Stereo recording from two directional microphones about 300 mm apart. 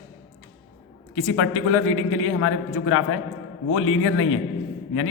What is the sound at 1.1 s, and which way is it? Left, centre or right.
A man's voice, left.